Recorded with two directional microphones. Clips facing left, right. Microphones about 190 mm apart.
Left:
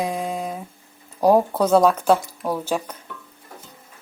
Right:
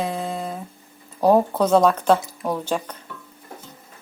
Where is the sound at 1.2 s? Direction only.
10° left (ahead or behind).